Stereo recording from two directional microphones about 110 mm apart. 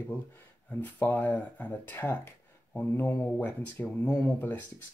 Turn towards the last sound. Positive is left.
turn(degrees=15)  # may be behind; listen again after turning